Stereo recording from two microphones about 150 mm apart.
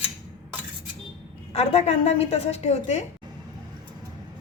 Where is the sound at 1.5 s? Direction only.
45° left (ahead or behind).